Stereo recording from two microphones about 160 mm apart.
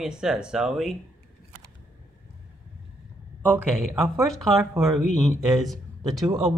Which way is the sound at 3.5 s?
5° left (ahead or behind).